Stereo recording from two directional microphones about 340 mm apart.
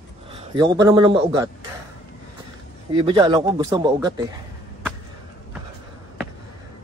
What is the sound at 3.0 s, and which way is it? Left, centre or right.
Speech, centre.